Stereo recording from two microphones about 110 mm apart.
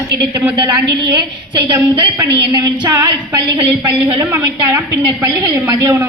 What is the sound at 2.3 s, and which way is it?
A woman's voice, 35° right (ahead or behind).